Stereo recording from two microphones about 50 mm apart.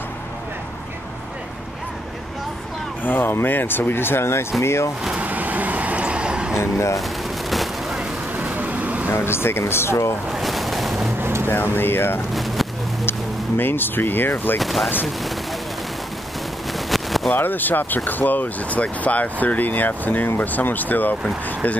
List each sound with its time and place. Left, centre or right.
3.0 s speech: left
4.6 s speech: left
5.1 s vehicle: right
6.6 s speech: left
7.0 s a sound: centre
8.4 s vehicle: right
9.1 s speech: left
10.3 s boat: centre
11.4 s speech: left
12.4 s a sound: centre
13.6 s speech: left
14.6 s speech: centre
16.7 s a sound: centre
17.4 s speech: left